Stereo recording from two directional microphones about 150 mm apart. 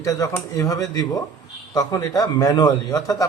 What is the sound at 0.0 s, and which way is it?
A man's voice, 20° left (ahead or behind).